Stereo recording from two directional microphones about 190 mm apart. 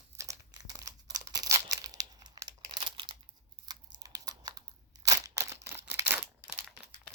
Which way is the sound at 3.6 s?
20° right (ahead or behind).